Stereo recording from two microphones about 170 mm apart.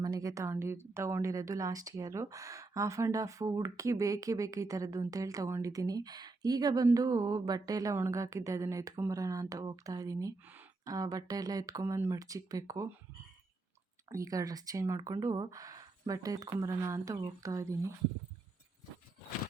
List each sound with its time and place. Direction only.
0.0 s speech: 20° right (ahead or behind)
14.1 s speech: 20° right (ahead or behind)